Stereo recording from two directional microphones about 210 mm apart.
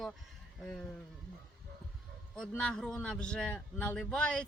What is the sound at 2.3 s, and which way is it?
A man's voice, 5° left (ahead or behind).